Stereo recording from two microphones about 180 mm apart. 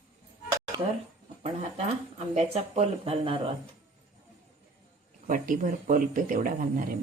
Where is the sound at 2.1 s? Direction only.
40° right (ahead or behind).